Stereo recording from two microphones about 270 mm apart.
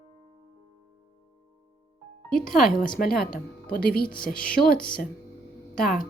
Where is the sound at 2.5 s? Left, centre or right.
Left.